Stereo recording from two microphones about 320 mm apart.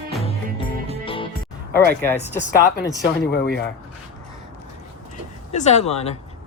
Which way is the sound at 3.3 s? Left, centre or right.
Left.